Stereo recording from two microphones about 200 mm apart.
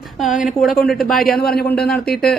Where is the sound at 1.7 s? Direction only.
5° left (ahead or behind).